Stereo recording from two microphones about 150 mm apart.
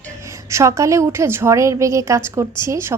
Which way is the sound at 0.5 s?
20° right (ahead or behind).